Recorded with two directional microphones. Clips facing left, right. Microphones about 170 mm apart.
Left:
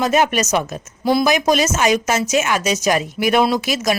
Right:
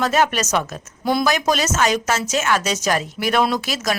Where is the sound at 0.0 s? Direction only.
15° left (ahead or behind).